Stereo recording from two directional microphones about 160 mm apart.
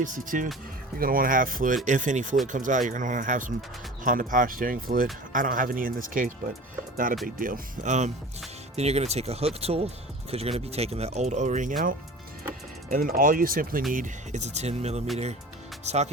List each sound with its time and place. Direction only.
0.0 s speech: 55° right (ahead or behind)
0.9 s speech: 65° right (ahead or behind)
13.9 s speech: 50° right (ahead or behind)